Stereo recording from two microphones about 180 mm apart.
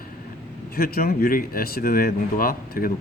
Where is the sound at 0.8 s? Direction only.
55° left (ahead or behind).